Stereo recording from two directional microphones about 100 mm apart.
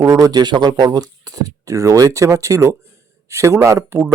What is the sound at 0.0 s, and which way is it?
A man's voice, 30° right (ahead or behind).